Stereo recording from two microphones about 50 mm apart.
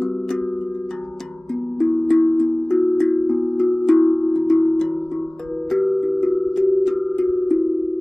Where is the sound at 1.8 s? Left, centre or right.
Centre.